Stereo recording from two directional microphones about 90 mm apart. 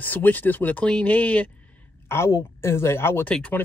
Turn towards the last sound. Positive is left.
turn(degrees=15)  # may be behind; listen again after turning